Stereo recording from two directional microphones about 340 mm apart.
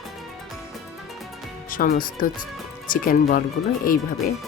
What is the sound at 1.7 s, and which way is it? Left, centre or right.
Speech, left.